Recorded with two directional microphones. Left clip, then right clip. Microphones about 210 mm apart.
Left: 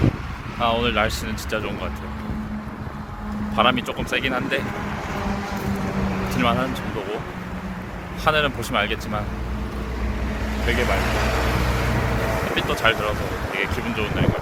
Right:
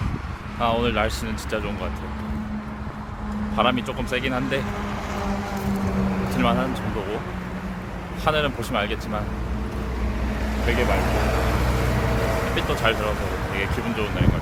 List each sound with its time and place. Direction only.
0.6 s speech: centre (ahead or behind)
3.5 s speech: 5° left (ahead or behind)
5.1 s vehicle: 55° right (ahead or behind); by 6.4 s 40° right (ahead or behind)
6.4 s speech: centre (ahead or behind)
8.2 s speech: 5° left (ahead or behind)
10.7 s speech: 5° right (ahead or behind)
11.0 s vehicle: 40° right (ahead or behind)
12.5 s speech: 5° left (ahead or behind)